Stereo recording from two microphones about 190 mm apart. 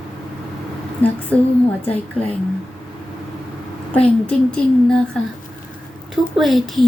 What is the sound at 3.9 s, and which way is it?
A woman's voice, 5° left (ahead or behind).